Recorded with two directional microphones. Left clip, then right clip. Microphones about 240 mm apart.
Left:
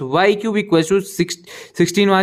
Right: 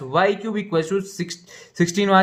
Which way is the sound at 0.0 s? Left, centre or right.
Left.